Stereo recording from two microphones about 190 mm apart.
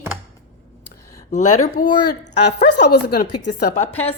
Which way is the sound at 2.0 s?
60° left (ahead or behind).